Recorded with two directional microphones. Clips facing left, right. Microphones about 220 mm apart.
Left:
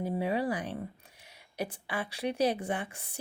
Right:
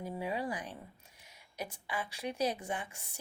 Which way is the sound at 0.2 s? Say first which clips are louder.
Left 5 dB; 65° left (ahead or behind).